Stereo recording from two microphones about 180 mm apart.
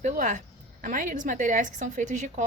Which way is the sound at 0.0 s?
45° right (ahead or behind).